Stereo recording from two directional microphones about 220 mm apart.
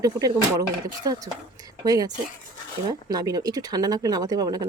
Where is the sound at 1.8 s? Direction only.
15° right (ahead or behind).